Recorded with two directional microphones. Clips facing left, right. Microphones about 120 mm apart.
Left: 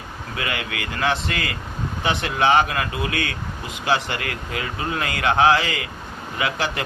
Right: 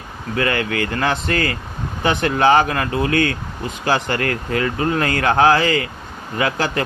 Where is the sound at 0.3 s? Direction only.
40° right (ahead or behind).